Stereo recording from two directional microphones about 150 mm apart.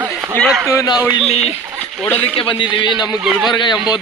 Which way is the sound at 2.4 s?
35° left (ahead or behind).